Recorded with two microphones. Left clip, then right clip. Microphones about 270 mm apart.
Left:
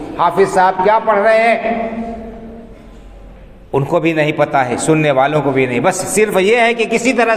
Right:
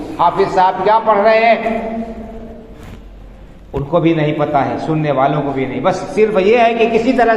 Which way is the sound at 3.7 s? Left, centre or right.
Left.